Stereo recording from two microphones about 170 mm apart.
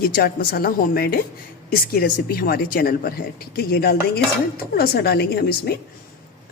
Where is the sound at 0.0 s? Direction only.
65° left (ahead or behind).